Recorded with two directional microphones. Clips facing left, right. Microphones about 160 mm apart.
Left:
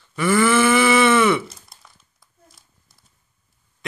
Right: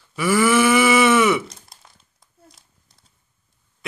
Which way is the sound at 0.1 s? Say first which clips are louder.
Even; 10° right (ahead or behind).